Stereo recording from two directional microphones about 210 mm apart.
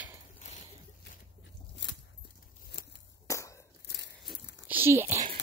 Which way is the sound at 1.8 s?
60° left (ahead or behind).